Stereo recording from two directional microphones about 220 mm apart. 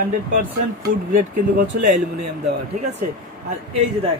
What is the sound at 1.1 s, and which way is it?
Speech, 35° right (ahead or behind).